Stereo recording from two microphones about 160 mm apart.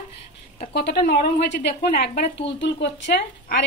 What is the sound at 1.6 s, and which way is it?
Speech, 85° left.